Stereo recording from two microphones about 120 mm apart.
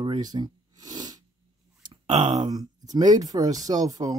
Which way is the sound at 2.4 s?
35° right (ahead or behind).